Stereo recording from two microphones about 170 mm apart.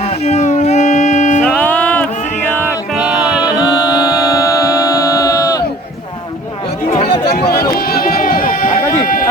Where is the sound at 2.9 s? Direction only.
5° right (ahead or behind).